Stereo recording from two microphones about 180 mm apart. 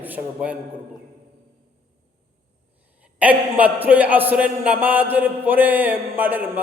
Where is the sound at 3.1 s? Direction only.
10° right (ahead or behind).